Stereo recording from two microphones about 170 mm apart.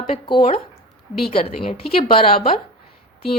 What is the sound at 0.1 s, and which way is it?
Speech, 30° left (ahead or behind).